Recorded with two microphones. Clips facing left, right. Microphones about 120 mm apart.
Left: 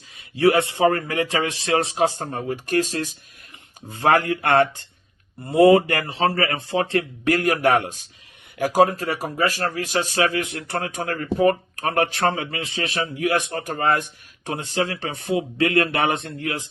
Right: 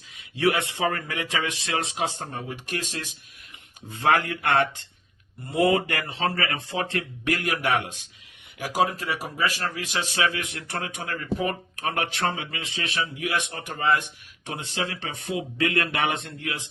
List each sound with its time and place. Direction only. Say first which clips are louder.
0.2 s speech: left 6 dB; 35° left (ahead or behind)